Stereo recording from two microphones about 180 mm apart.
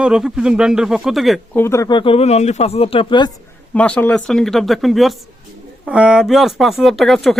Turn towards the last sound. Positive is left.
turn(degrees=0)  # may be behind; listen again after turning